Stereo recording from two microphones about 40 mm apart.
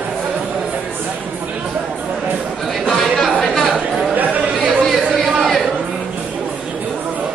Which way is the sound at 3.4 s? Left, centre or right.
Centre.